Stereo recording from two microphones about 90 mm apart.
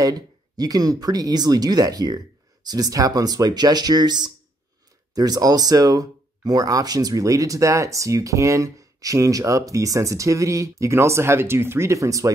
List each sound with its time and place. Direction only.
0.0 s speech: 45° right (ahead or behind)